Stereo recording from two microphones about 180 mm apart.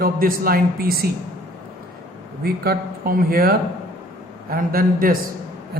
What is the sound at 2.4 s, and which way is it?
A man's voice, 55° right (ahead or behind).